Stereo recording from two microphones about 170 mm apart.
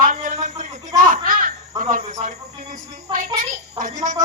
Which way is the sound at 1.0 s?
55° right (ahead or behind).